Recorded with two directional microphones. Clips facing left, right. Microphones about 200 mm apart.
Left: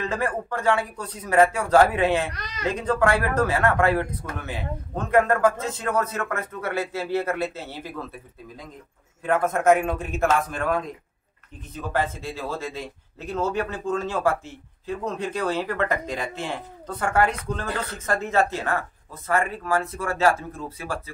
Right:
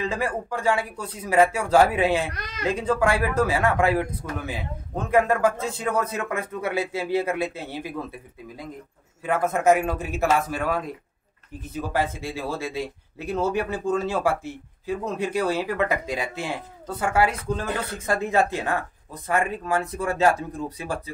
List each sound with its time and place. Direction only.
0.0 s speech: 10° right (ahead or behind)
2.3 s speech: 55° right (ahead or behind)
2.7 s speech: 10° right (ahead or behind)
9.2 s speech: 5° right (ahead or behind)